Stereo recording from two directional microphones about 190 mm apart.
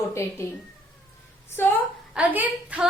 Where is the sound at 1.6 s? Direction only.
10° left (ahead or behind).